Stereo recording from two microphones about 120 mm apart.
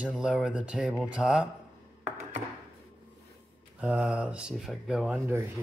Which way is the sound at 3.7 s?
10° right (ahead or behind).